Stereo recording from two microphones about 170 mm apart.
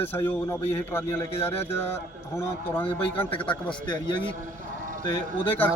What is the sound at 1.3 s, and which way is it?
Speech, 35° left (ahead or behind).